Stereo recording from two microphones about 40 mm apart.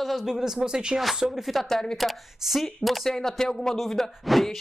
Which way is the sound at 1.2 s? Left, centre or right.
Centre.